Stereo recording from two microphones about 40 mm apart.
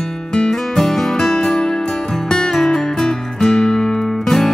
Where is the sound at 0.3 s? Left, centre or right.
Centre.